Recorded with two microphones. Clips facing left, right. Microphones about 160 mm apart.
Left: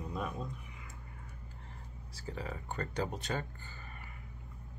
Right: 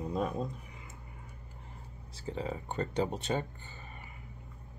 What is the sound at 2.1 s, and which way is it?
Speech, 25° right (ahead or behind).